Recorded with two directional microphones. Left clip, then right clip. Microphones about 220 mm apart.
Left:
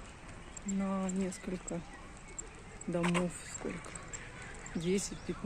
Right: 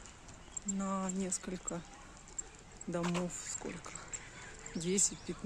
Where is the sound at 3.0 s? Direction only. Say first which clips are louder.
Left 4 dB; 5° left (ahead or behind).